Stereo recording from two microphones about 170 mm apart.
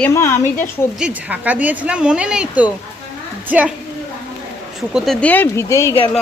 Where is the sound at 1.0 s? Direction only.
5° right (ahead or behind).